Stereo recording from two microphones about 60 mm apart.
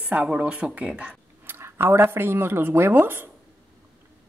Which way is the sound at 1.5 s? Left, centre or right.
Right.